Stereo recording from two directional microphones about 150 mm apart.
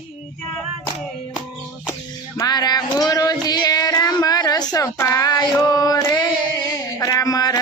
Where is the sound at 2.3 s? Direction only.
25° left (ahead or behind).